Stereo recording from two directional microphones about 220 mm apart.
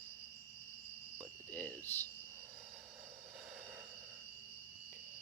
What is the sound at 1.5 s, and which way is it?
Cricket, 10° left (ahead or behind).